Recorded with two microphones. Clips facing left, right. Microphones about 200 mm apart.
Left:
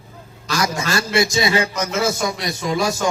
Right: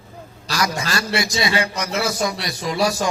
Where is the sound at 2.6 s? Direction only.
35° right (ahead or behind).